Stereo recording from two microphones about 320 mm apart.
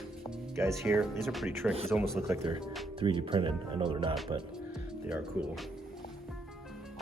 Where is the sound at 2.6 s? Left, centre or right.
Centre.